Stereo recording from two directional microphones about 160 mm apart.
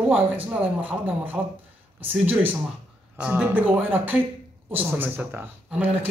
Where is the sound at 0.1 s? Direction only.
10° right (ahead or behind).